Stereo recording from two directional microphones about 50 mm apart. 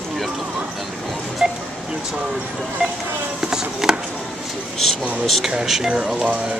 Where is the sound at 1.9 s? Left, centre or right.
Centre.